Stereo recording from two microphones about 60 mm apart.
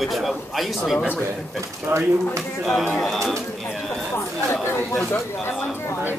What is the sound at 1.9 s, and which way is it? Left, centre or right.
Speech, right.